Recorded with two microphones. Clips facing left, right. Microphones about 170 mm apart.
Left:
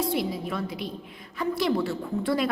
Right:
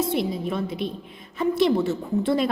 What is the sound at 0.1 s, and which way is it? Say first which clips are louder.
A woman's voice: right 3 dB; 25° right (ahead or behind).